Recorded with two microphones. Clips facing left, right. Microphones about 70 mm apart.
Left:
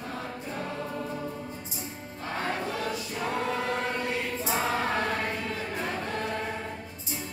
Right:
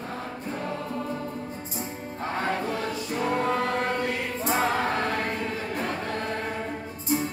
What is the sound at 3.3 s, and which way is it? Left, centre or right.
Choir, right.